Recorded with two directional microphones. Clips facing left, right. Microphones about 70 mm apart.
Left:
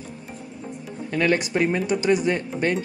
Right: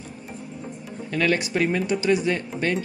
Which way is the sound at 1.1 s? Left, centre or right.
Left.